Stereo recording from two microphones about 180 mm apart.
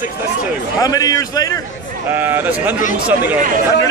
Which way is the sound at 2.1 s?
10° right (ahead or behind).